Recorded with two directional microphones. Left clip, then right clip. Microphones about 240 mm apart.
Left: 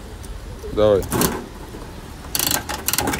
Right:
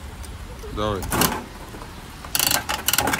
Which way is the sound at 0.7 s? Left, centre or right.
Centre.